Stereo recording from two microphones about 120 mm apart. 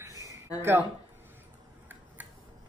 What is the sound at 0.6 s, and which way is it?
Speech, 20° right (ahead or behind).